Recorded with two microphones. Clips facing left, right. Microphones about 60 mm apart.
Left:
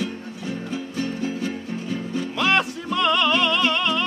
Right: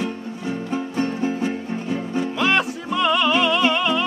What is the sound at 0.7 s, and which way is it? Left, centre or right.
Music, right.